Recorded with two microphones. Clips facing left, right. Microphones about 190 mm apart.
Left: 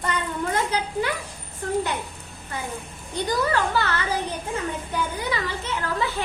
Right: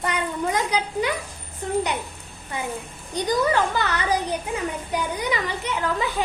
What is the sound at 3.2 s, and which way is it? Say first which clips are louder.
Speech: right 2 dB; 15° right (ahead or behind).